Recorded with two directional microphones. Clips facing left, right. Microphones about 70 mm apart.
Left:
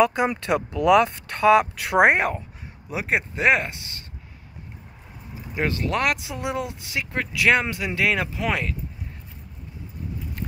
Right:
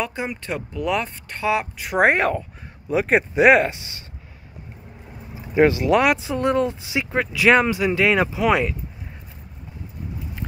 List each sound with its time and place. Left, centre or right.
0.0 s speech: left
2.0 s speech: centre
2.9 s speech: centre
5.5 s speech: centre